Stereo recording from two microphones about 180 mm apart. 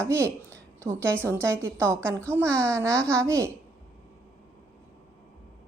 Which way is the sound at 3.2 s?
15° right (ahead or behind).